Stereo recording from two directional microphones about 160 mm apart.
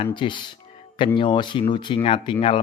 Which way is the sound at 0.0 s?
30° left (ahead or behind).